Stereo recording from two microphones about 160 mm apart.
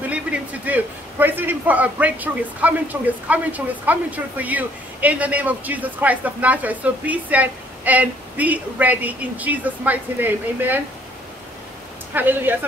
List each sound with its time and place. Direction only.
0.1 s a man's voice: 10° right (ahead or behind)
12.1 s a man's voice: 10° right (ahead or behind)